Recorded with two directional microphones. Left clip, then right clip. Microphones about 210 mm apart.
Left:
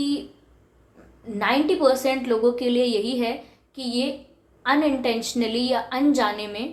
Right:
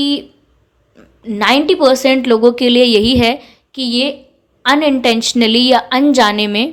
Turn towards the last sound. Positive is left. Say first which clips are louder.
# right 12 dB
turn(degrees=-40)  # may be behind; listen again after turning